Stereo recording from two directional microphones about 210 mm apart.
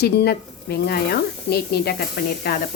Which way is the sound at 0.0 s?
50° left (ahead or behind).